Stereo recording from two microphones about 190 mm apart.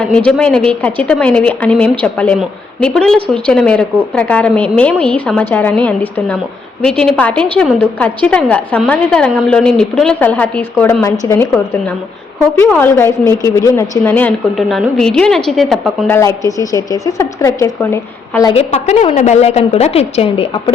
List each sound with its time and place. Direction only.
0.0 s a woman's voice: 5° left (ahead or behind)
16.0 s a woman's voice: 15° left (ahead or behind)
18.5 s a woman's voice: 35° left (ahead or behind)